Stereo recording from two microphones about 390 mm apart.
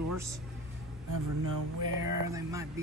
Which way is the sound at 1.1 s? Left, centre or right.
Right.